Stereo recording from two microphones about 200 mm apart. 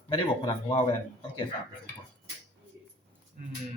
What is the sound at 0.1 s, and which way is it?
Speech, 25° left (ahead or behind).